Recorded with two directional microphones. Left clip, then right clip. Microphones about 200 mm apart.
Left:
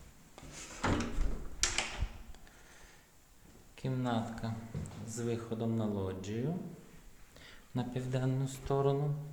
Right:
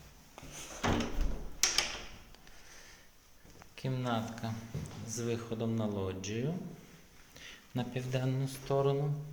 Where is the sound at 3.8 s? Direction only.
15° left (ahead or behind).